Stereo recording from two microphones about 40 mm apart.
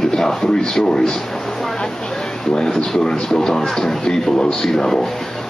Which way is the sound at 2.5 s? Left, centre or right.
Centre.